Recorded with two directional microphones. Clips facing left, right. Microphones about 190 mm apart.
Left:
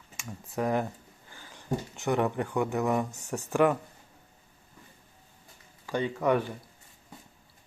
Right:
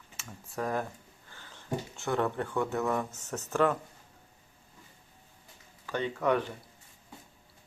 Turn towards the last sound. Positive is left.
turn(degrees=10)  # may be behind; listen again after turning